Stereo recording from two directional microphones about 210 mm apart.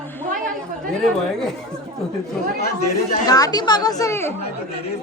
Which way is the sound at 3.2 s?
20° left (ahead or behind).